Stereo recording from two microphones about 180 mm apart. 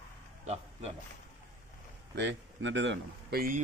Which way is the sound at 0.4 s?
35° right (ahead or behind).